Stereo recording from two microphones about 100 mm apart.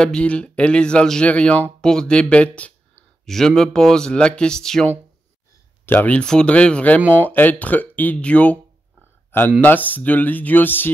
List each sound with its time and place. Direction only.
0.0 s speech: 10° left (ahead or behind)
5.9 s speech: 15° left (ahead or behind)
9.6 s speech: 15° left (ahead or behind)